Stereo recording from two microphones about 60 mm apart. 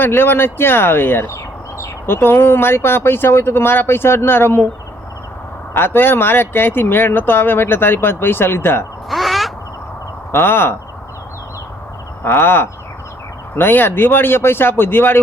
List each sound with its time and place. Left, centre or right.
0.0 s speech: left
5.7 s speech: left
9.0 s owl: centre
10.3 s speech: left
12.2 s speech: left